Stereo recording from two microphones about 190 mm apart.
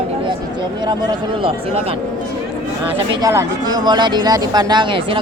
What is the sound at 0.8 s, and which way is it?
Speech, 20° right (ahead or behind).